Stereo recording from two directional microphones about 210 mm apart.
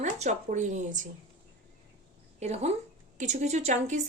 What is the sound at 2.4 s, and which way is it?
Speech, 30° right (ahead or behind).